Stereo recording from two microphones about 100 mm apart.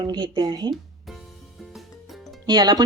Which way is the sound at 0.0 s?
50° right (ahead or behind).